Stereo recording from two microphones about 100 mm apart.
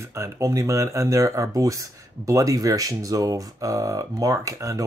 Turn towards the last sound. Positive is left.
turn(degrees=-35)  # may be behind; listen again after turning